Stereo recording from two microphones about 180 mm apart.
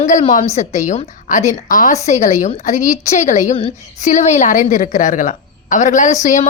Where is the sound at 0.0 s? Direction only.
45° left (ahead or behind).